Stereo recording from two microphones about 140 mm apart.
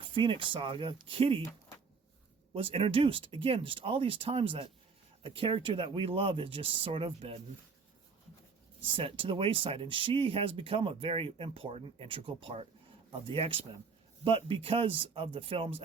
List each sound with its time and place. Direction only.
0.0 s speech: 35° right (ahead or behind)
2.5 s speech: 40° right (ahead or behind)
8.8 s speech: 40° right (ahead or behind)